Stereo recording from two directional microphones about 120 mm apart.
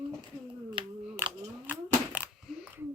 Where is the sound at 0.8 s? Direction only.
45° right (ahead or behind).